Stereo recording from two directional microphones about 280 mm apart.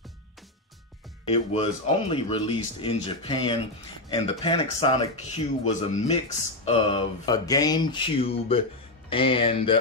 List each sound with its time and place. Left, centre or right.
1.2 s speech: left